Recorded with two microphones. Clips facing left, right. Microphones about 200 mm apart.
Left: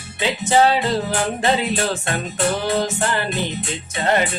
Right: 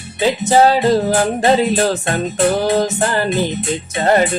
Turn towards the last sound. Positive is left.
turn(degrees=-40)  # may be behind; listen again after turning